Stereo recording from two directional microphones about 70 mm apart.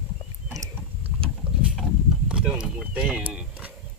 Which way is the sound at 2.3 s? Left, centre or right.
Centre.